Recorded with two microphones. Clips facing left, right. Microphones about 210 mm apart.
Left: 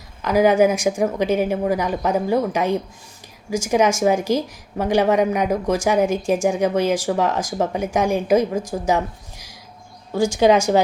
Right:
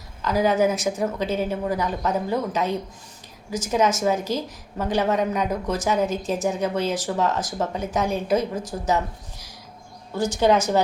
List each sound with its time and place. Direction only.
0.2 s a woman's voice: 15° left (ahead or behind)
10.2 s a woman's voice: 10° left (ahead or behind)